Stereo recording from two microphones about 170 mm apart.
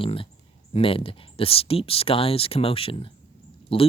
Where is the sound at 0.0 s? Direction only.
30° left (ahead or behind).